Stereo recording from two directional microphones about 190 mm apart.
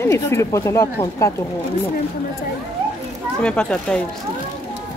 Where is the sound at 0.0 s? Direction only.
15° left (ahead or behind).